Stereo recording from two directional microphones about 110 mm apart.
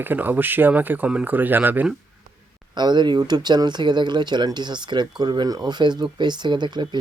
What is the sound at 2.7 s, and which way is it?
Speech, 40° right (ahead or behind).